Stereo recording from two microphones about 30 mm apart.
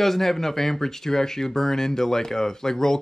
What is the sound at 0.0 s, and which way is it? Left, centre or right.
Speech, centre.